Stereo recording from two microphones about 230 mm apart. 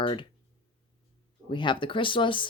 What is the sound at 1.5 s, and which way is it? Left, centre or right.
Speech, left.